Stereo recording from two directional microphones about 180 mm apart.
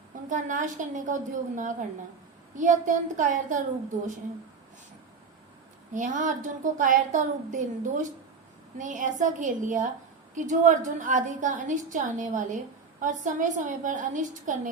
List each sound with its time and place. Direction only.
0.3 s a woman's voice: 45° right (ahead or behind)
5.9 s a woman's voice: 45° right (ahead or behind)